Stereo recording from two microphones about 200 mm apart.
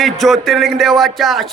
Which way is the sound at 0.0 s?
Centre (ahead or behind).